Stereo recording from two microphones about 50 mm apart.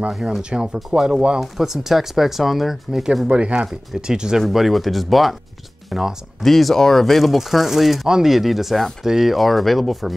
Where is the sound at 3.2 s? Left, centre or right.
Centre.